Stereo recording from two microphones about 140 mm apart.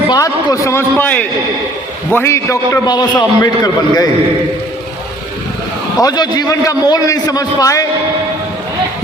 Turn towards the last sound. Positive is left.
turn(degrees=25)  # may be behind; listen again after turning